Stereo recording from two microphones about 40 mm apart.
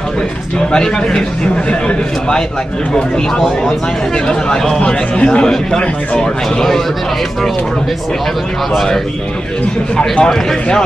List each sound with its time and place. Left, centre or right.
0.6 s a man's voice: left
4.3 s a man's voice: left
5.4 s a man's voice: centre
9.9 s a man's voice: left